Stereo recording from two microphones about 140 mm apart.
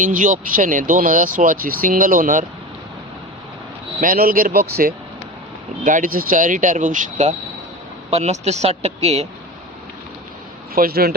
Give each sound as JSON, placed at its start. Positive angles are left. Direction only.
{"t": 0.0, "sound": "speech", "side_deg": -75}
{"t": 4.0, "sound": "speech", "side_deg": -85}
{"t": 5.8, "sound": "speech", "side_deg": -75}
{"t": 10.8, "sound": "speech", "side_deg": -90}